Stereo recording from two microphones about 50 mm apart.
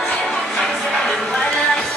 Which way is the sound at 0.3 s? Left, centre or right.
Centre.